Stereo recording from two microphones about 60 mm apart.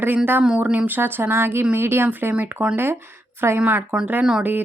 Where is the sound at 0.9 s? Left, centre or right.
Right.